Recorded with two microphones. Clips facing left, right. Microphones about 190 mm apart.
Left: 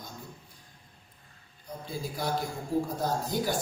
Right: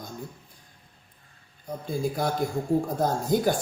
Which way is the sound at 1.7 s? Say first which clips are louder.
Right 8 dB; 50° right (ahead or behind).